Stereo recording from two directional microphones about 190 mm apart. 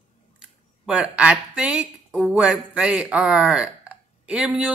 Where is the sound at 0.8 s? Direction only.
5° right (ahead or behind).